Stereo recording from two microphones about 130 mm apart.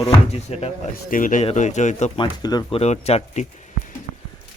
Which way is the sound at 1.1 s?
90° left.